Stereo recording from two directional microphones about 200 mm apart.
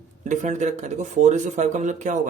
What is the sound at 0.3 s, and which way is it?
Speech, 35° right (ahead or behind).